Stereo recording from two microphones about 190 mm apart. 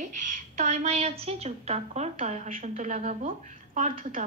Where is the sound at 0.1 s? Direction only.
40° right (ahead or behind).